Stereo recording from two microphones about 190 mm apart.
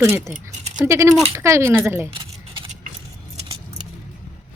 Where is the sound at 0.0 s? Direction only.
15° right (ahead or behind).